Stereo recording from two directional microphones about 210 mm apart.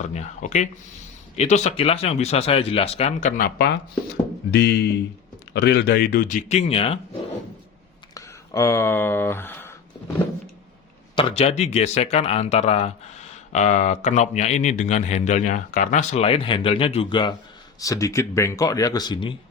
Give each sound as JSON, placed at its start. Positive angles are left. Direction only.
{"t": 0.1, "sound": "speech", "side_deg": 35}
{"t": 4.5, "sound": "speech", "side_deg": 50}
{"t": 8.1, "sound": "speech", "side_deg": 15}
{"t": 11.1, "sound": "speech", "side_deg": 25}